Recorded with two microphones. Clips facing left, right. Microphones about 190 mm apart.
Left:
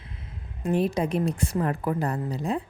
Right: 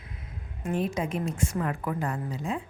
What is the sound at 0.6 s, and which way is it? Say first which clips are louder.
A woman's voice: left 4 dB; 35° left (ahead or behind).